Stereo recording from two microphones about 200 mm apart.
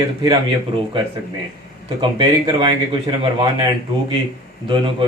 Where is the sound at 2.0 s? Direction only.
25° right (ahead or behind).